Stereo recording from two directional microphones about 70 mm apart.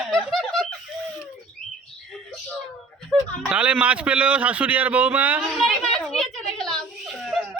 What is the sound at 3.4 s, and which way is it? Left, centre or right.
A man's voice, centre.